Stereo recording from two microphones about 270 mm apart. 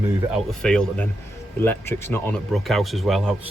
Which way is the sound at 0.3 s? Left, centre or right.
Centre.